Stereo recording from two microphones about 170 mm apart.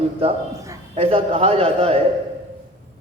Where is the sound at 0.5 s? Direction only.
15° right (ahead or behind).